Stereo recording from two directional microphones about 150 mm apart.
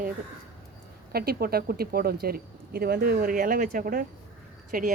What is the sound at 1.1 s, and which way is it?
Speech, 90° right.